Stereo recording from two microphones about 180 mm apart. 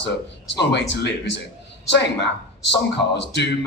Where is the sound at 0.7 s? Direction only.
75° left (ahead or behind).